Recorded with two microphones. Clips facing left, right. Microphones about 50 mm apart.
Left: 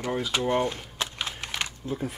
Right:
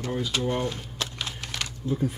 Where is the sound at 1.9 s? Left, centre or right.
Centre.